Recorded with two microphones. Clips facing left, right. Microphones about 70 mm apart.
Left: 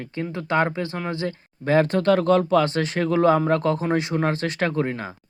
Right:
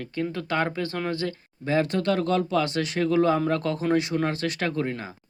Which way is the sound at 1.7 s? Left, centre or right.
Left.